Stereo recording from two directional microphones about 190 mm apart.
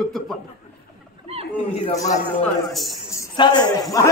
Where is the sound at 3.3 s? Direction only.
25° left (ahead or behind).